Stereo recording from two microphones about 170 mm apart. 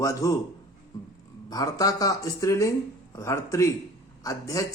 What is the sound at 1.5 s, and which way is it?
Speech, 20° left (ahead or behind).